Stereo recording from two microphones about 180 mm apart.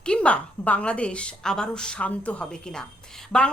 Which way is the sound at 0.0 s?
5° left (ahead or behind).